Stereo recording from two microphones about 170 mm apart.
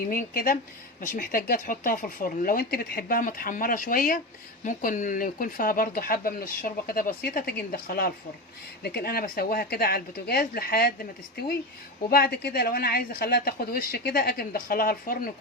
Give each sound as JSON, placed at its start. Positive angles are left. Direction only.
{"t": 0.1, "sound": "speech", "side_deg": 55}
{"t": 12.1, "sound": "speech", "side_deg": 65}